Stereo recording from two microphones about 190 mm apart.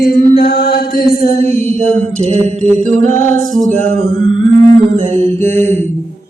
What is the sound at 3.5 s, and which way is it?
Music, 5° left (ahead or behind).